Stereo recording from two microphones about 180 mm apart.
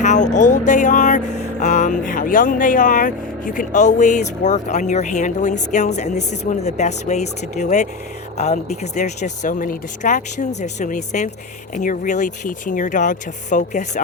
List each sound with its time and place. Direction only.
0.0 s speech: 40° left (ahead or behind)